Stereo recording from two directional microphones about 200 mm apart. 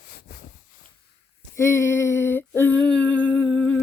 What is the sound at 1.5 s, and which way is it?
Humming, 15° left (ahead or behind).